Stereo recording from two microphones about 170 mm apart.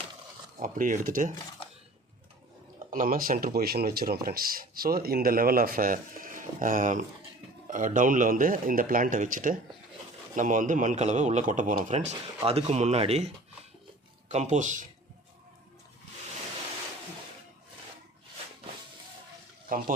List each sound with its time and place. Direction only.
0.6 s speech: 55° right (ahead or behind)
2.9 s speech: 55° right (ahead or behind)
19.7 s speech: 55° right (ahead or behind)